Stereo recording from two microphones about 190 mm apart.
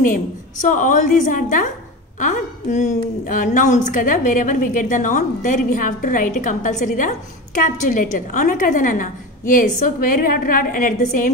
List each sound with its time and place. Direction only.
0.0 s a woman's voice: 45° left (ahead or behind)